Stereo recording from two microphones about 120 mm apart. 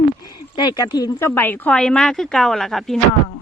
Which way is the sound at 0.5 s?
35° left (ahead or behind).